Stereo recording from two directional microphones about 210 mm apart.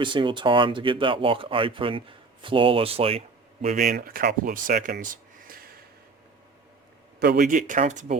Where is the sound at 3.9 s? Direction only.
45° right (ahead or behind).